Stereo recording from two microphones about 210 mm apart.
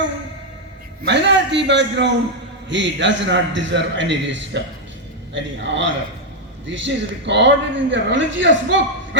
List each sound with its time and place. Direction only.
1.0 s a man's voice: 55° right (ahead or behind)